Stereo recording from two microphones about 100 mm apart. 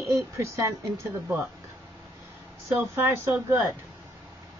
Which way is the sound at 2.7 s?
25° right (ahead or behind).